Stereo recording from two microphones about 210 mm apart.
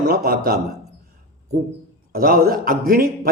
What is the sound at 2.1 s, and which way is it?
A man's voice, 45° right (ahead or behind).